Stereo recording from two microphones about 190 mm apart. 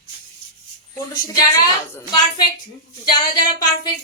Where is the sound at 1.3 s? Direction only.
20° left (ahead or behind).